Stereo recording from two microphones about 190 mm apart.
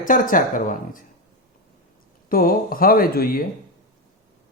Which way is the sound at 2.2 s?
50° left (ahead or behind).